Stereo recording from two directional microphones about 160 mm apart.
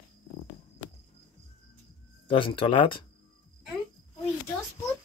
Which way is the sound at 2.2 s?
30° left (ahead or behind).